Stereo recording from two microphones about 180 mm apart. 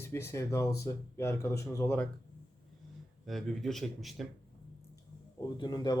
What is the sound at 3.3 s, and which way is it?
Speech, centre (ahead or behind).